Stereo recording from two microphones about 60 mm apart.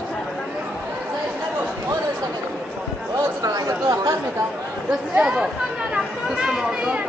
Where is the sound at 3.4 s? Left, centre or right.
Right.